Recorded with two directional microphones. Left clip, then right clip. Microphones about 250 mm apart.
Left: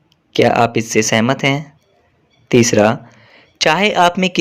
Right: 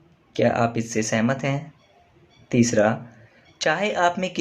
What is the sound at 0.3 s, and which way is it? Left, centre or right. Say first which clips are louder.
Speech: left 9 dB; left.